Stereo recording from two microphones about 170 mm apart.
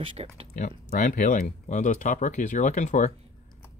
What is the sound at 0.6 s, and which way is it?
Speech, 50° left (ahead or behind).